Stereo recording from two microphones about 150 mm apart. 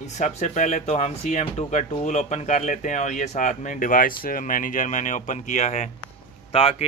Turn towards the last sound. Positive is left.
turn(degrees=40)  # may be behind; listen again after turning